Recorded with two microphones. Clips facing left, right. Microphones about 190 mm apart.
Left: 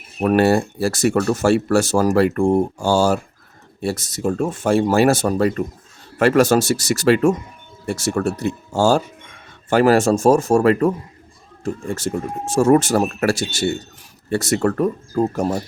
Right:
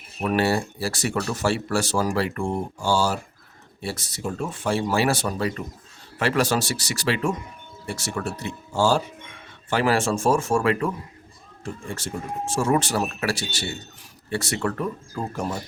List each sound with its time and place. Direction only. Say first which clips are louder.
0.2 s speech: left 7 dB; 50° left (ahead or behind)